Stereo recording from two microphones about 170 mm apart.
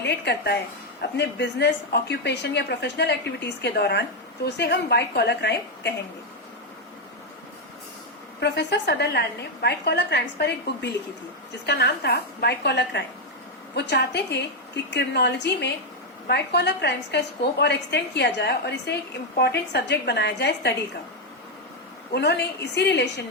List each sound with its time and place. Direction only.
0.0 s a woman's voice: 80° left
8.4 s a woman's voice: 85° left
16.2 s a woman's voice: 75° left (ahead or behind)
22.1 s a woman's voice: 80° left